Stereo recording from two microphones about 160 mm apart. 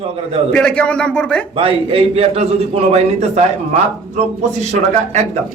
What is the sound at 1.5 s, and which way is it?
A man's voice, 35° right (ahead or behind).